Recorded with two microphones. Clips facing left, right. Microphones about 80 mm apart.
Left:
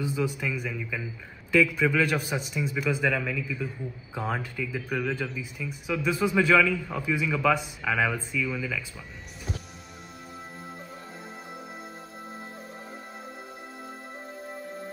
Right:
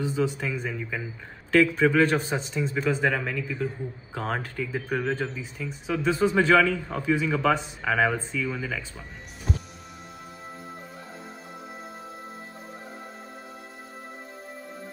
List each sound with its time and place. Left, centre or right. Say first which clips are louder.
0.0 s speech: right 2 dB; right